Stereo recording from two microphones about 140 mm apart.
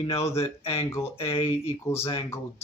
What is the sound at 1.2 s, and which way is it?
Speech, 40° left (ahead or behind).